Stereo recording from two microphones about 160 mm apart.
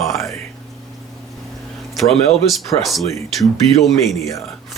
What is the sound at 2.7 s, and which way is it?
Speech, 35° left (ahead or behind).